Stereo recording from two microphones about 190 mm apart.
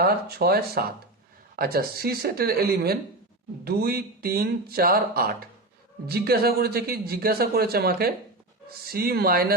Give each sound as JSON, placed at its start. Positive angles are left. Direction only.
{"t": 0.0, "sound": "a man's voice", "side_deg": -55}